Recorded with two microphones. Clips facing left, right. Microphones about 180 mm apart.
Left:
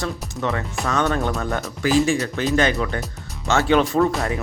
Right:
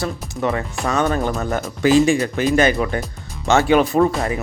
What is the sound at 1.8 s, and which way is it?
Speech, 15° right (ahead or behind).